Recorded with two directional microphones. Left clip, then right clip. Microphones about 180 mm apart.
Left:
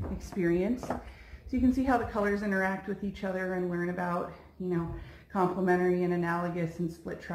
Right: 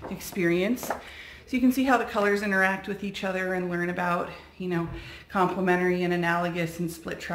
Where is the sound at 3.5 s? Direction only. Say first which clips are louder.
Right 4 dB; 20° right (ahead or behind).